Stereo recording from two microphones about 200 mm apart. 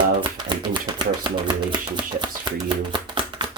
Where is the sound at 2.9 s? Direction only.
25° right (ahead or behind).